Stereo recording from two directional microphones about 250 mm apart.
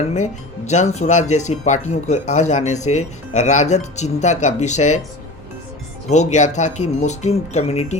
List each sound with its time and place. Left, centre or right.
0.1 s speech: left
6.1 s speech: left